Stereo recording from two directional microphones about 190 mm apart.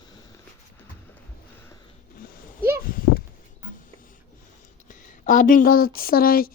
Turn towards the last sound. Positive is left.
turn(degrees=50)  # may be behind; listen again after turning